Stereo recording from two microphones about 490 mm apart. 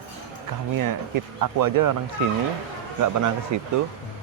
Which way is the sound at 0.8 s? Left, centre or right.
Right.